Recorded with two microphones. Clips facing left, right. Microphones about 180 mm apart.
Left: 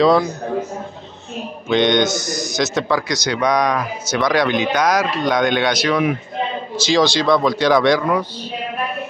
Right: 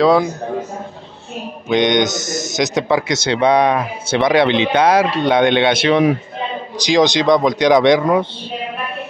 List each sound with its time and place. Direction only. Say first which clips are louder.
0.0 s a man's voice: right 1 dB; 10° right (ahead or behind)
1.7 s speech: right 1 dB; 15° right (ahead or behind)